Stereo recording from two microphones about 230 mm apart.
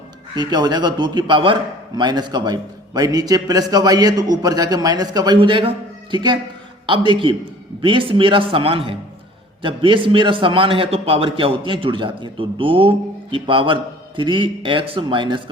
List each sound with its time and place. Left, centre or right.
0.3 s a man's voice: centre